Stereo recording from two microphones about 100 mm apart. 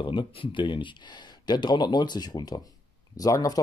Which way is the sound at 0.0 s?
55° left (ahead or behind).